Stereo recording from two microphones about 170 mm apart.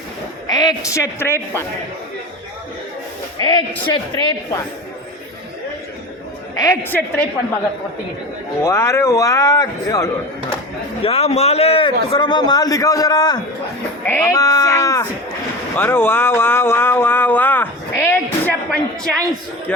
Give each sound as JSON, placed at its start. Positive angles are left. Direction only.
{"t": 0.4, "sound": "speech", "side_deg": 20}
{"t": 3.4, "sound": "speech", "side_deg": 30}
{"t": 6.6, "sound": "a woman's voice", "side_deg": 20}
{"t": 8.6, "sound": "speech", "side_deg": 15}
{"t": 11.0, "sound": "a man's voice", "side_deg": 35}
{"t": 15.7, "sound": "a sound", "side_deg": 10}